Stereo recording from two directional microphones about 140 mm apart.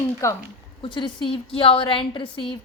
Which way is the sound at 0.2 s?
20° left (ahead or behind).